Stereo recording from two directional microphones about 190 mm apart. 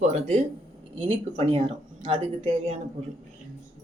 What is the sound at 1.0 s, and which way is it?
Speech, 35° right (ahead or behind).